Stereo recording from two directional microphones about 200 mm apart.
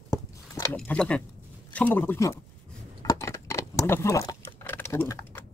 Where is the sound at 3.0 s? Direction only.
15° left (ahead or behind).